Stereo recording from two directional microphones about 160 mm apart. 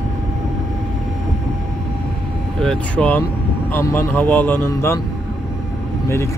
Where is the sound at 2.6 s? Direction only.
5° left (ahead or behind).